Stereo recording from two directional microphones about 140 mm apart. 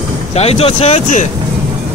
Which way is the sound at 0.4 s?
45° left (ahead or behind).